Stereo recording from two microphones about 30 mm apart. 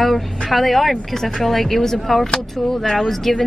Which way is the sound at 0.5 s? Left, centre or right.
Centre.